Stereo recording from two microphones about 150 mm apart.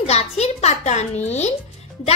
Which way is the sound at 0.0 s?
45° left (ahead or behind).